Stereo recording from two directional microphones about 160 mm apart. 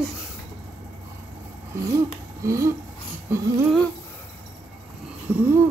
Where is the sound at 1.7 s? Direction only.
20° right (ahead or behind).